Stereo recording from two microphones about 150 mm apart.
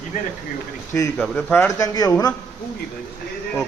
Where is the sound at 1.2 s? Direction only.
5° left (ahead or behind).